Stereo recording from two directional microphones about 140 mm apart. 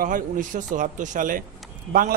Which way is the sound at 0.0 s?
70° right (ahead or behind).